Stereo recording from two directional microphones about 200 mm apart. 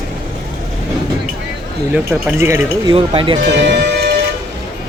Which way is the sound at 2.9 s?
25° right (ahead or behind).